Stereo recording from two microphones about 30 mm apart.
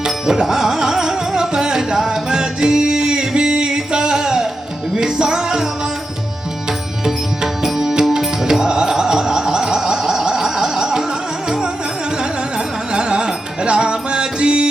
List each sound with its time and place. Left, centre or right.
0.0 s music: centre
7.0 s music: centre
10.1 s a sound: centre
12.2 s music: right